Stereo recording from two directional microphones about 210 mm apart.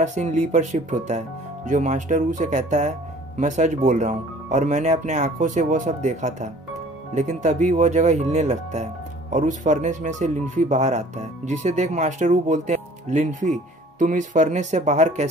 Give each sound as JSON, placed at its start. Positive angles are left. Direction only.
{"t": 0.0, "sound": "speech", "side_deg": -35}